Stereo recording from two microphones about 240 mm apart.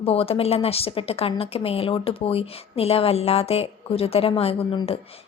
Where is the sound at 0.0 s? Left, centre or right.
Left.